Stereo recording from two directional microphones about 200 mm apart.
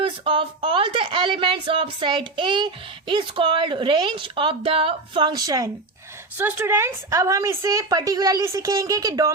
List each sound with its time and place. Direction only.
0.0 s speech: 25° right (ahead or behind)